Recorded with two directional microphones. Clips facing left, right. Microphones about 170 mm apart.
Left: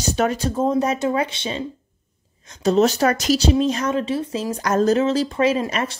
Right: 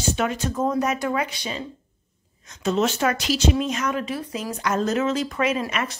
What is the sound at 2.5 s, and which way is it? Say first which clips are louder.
Speech: left 6 dB; 35° left (ahead or behind).